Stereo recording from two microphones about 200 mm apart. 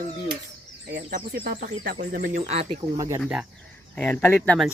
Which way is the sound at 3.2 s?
Centre (ahead or behind).